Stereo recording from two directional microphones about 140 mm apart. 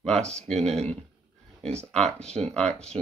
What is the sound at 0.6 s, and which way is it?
Speech, 50° right (ahead or behind).